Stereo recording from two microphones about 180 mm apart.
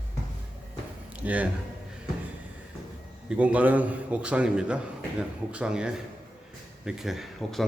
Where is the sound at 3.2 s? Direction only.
5° right (ahead or behind).